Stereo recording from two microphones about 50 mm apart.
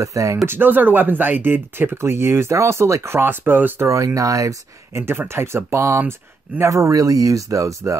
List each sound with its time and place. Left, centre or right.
0.0 s speech: right
0.5 s speech: right
2.0 s speech: right
3.2 s speech: right
3.8 s speech: right
6.6 s speech: right